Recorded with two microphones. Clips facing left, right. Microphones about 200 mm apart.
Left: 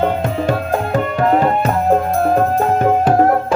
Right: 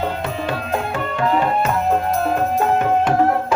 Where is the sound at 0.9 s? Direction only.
45° left (ahead or behind).